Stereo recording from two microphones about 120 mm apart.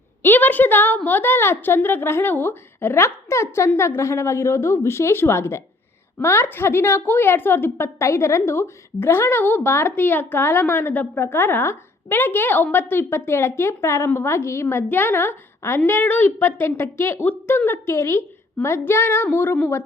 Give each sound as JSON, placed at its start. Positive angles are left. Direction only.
{"t": 0.2, "sound": "a woman's voice", "side_deg": 15}